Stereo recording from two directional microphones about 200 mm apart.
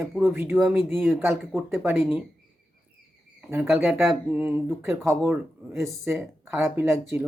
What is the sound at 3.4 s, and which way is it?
Speech, 5° right (ahead or behind).